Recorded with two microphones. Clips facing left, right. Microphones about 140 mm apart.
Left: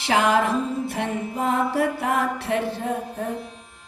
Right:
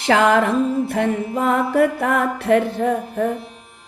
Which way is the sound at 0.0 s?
60° right (ahead or behind).